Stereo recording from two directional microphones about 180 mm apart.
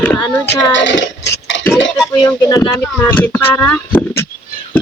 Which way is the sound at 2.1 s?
15° left (ahead or behind).